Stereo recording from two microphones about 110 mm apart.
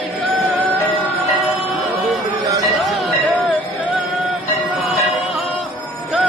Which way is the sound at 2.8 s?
Centre (ahead or behind).